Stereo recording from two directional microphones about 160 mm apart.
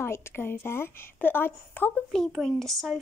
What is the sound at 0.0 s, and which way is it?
A woman's voice, 15° left (ahead or behind).